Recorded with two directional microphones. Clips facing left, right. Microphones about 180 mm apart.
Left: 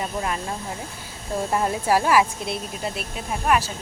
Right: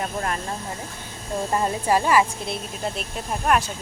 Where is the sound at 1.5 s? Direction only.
5° left (ahead or behind).